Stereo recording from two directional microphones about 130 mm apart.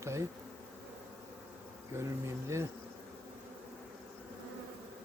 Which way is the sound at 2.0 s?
20° right (ahead or behind).